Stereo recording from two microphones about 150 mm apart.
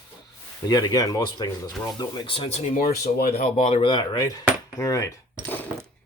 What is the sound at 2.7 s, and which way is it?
Speech, 65° left (ahead or behind).